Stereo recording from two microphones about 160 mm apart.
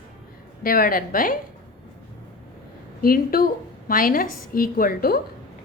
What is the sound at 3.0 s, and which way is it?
A woman's voice, 65° left (ahead or behind).